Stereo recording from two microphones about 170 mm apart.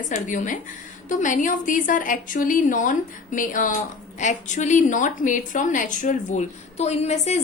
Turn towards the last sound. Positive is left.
turn(degrees=40)  # may be behind; listen again after turning